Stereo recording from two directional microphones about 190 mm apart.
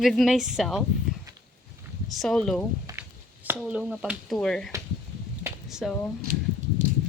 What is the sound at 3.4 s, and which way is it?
Speech, 5° right (ahead or behind).